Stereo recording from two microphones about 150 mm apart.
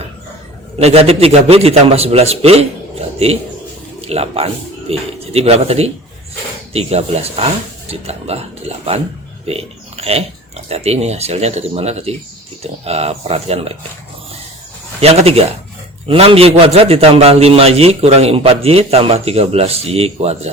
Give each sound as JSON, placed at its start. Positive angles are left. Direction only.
{"t": 0.8, "sound": "a man's voice", "side_deg": -45}
{"t": 4.0, "sound": "a man's voice", "side_deg": -40}
{"t": 15.0, "sound": "a man's voice", "side_deg": -40}